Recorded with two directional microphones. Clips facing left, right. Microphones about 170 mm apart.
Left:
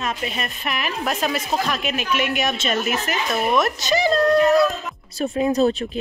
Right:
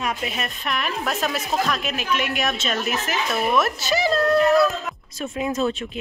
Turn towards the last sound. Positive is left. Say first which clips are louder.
# left 5 dB
turn(degrees=35)  # may be behind; listen again after turning